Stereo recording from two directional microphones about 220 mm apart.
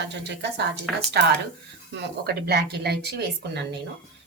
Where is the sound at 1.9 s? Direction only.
50° right (ahead or behind).